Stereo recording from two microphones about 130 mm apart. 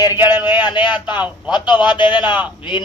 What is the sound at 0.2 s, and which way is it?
Speech, 15° right (ahead or behind).